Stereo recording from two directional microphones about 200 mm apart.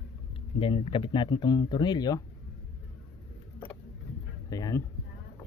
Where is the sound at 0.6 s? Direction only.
25° left (ahead or behind).